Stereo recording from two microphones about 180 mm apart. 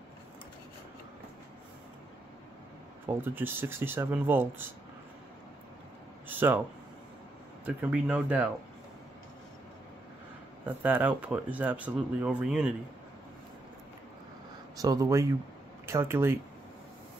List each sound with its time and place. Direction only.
3.1 s speech: 10° right (ahead or behind)
6.2 s a sound: 10° right (ahead or behind)
7.6 s speech: 5° right (ahead or behind)
10.6 s speech: 10° right (ahead or behind)
14.8 s speech: 20° right (ahead or behind)